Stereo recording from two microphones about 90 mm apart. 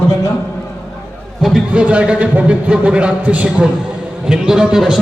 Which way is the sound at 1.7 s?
15° right (ahead or behind).